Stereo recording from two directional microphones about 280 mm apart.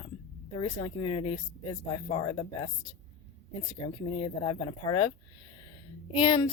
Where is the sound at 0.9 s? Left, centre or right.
Centre.